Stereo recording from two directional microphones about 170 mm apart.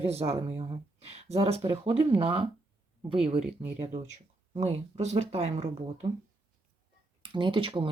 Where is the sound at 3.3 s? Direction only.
5° right (ahead or behind).